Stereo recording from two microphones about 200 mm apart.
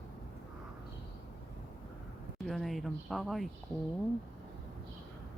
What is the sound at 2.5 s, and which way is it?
Speech, centre (ahead or behind).